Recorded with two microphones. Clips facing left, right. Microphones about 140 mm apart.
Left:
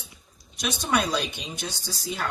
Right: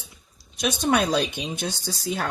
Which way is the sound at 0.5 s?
55° right (ahead or behind).